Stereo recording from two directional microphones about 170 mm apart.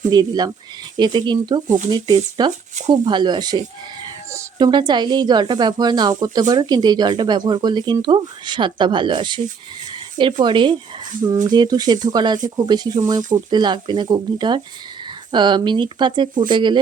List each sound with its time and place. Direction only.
0.1 s speech: 25° right (ahead or behind)
2.5 s speech: 45° right (ahead or behind)
2.9 s speech: 25° right (ahead or behind)
10.4 s speech: 25° right (ahead or behind)